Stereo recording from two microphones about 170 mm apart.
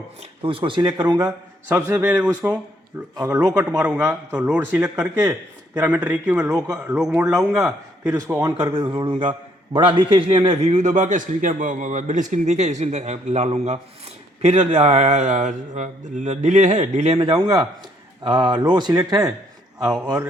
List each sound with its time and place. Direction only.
0.4 s a man's voice: 30° right (ahead or behind)
1.7 s a man's voice: 10° right (ahead or behind)
3.2 s a man's voice: 20° right (ahead or behind)
3.8 s a man's voice: 5° right (ahead or behind)
4.3 s a man's voice: 15° right (ahead or behind); by 17.3 s 40° right (ahead or behind)
17.3 s a man's voice: 20° right (ahead or behind)